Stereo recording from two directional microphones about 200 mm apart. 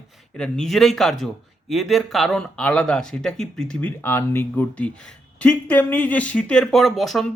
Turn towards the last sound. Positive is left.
turn(degrees=0)  # may be behind; listen again after turning